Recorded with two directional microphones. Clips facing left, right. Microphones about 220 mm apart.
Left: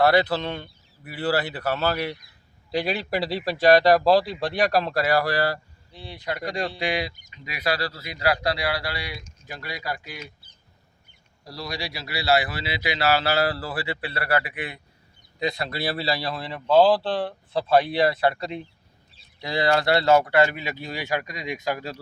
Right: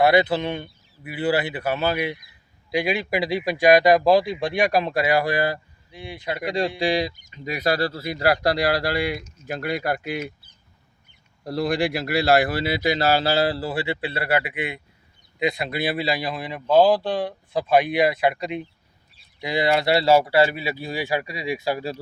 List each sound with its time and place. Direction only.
0.0 s speech: 15° right (ahead or behind)
7.4 s speech: 45° right (ahead or behind)
11.4 s speech: 55° right (ahead or behind); by 19.7 s 20° right (ahead or behind)
20.0 s speech: 10° right (ahead or behind)